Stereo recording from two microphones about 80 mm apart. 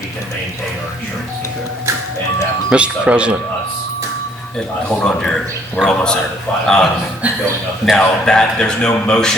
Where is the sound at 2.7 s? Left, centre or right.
Centre.